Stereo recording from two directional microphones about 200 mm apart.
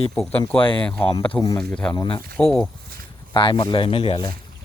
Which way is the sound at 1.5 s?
5° left (ahead or behind).